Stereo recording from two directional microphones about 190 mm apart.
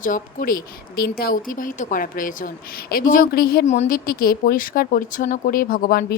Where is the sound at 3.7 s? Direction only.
45° left (ahead or behind).